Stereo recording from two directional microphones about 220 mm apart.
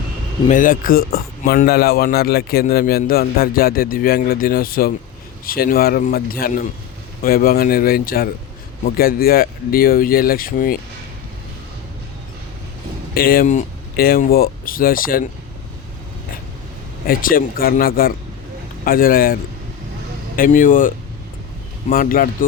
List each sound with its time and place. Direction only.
0.4 s a man's voice: 35° left (ahead or behind)
13.1 s speech: 45° left (ahead or behind)
17.1 s speech: 40° left (ahead or behind)